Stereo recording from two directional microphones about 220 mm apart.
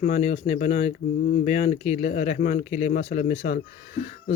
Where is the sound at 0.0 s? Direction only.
35° left (ahead or behind).